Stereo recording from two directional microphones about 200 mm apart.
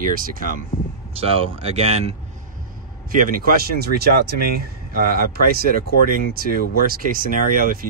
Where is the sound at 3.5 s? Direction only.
50° right (ahead or behind).